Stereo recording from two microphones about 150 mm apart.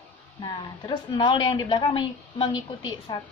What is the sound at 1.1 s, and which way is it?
A woman's voice, 30° left (ahead or behind).